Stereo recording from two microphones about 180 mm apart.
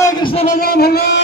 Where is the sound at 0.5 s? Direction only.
60° left (ahead or behind).